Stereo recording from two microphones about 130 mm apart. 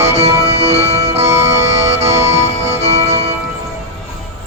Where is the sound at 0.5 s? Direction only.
55° right (ahead or behind).